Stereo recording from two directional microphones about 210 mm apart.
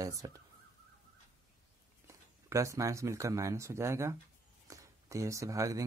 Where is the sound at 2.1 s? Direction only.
15° right (ahead or behind).